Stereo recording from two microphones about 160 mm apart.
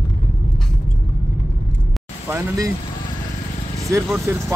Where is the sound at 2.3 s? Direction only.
15° right (ahead or behind).